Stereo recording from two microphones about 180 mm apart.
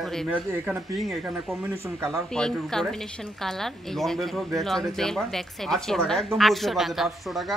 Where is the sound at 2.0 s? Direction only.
Centre (ahead or behind).